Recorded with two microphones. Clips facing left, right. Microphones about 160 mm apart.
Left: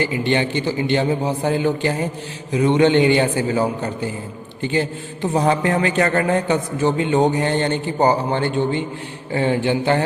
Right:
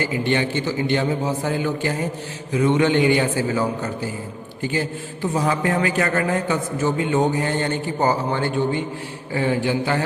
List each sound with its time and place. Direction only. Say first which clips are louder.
0.0 s a man's voice: left 2 dB; 20° left (ahead or behind)
5.3 s a sound: left 4 dB; 35° left (ahead or behind)
5.6 s a man's voice: left 2 dB; 25° left (ahead or behind)